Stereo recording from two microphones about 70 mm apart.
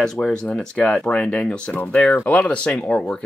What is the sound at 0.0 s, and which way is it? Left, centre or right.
Speech, centre.